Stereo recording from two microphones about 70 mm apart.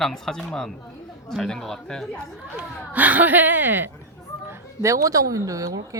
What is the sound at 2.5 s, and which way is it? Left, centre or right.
Speech, right.